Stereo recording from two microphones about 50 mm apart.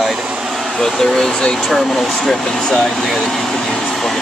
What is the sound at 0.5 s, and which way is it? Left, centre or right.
Speech, centre.